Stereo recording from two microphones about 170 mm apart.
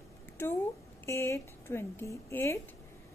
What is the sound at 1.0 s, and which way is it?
A woman's voice, 15° left (ahead or behind).